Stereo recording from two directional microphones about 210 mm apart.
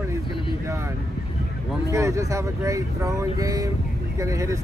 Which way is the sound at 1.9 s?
15° right (ahead or behind).